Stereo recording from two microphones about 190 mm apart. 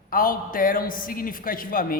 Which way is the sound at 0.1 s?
50° left (ahead or behind).